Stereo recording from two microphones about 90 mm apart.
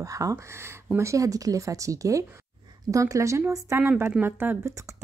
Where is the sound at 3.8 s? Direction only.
20° right (ahead or behind).